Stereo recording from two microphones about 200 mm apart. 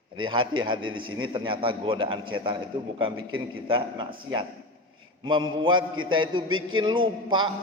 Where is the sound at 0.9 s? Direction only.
90° right.